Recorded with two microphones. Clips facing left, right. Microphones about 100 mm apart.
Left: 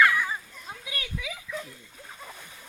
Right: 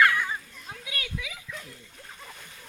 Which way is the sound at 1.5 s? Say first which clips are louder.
Left 5 dB; 10° left (ahead or behind).